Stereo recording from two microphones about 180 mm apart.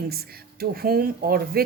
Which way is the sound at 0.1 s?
60° right (ahead or behind).